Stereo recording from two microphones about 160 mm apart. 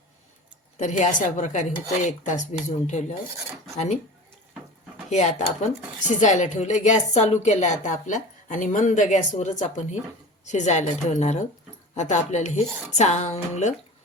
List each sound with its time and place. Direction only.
0.8 s a woman's voice: 50° left (ahead or behind)
5.0 s a woman's voice: 45° left (ahead or behind)